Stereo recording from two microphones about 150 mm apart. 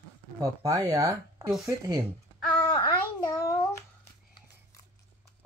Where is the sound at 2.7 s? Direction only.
30° left (ahead or behind).